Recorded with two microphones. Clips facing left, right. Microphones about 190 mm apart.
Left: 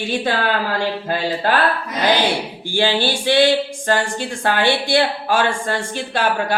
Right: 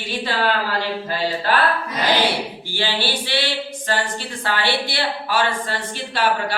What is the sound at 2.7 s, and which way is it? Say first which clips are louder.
Speech: left 6 dB; 50° left (ahead or behind).